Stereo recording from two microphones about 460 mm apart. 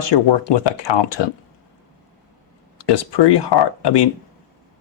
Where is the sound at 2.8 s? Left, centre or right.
Left.